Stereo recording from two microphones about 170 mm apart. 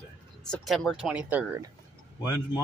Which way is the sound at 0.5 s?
Centre (ahead or behind).